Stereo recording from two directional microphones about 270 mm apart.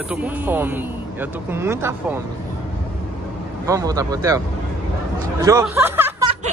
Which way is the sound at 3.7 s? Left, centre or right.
Centre.